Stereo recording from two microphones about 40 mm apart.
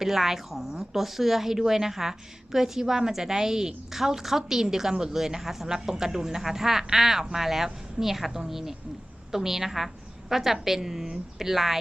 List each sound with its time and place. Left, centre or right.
0.0 s speech: centre